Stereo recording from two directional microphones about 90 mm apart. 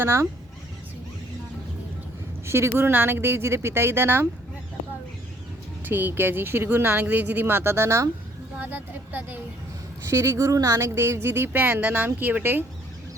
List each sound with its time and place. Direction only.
0.0 s speech: 30° right (ahead or behind)
2.5 s speech: 30° right (ahead or behind)
5.8 s speech: 25° right (ahead or behind)
8.5 s speech: 20° right (ahead or behind)
10.1 s speech: 35° right (ahead or behind)